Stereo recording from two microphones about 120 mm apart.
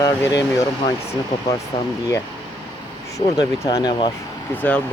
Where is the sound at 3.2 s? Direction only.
30° left (ahead or behind).